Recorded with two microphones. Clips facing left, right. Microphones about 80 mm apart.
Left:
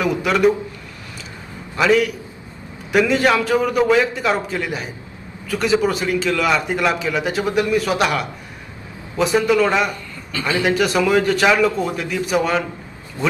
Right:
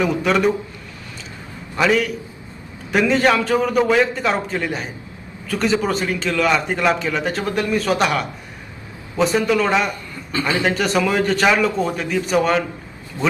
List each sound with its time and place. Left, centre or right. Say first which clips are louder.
0.0 s a man's voice: left 1 dB; centre
1.7 s a man's voice: left 2 dB; centre
10.3 s a man's voice: right 1 dB; right
10.8 s a man's voice: left 2 dB; centre